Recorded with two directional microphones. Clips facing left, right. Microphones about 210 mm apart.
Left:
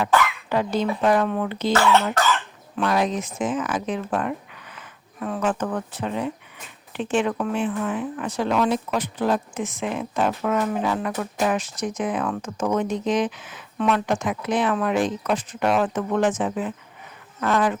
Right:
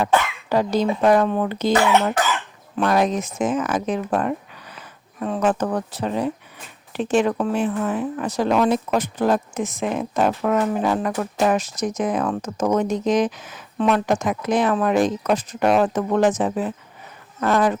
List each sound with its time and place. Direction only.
0.5 s speech: 40° right (ahead or behind)
1.7 s speech: 15° right (ahead or behind)
2.1 s cough: 10° right (ahead or behind)
2.7 s speech: 45° right (ahead or behind)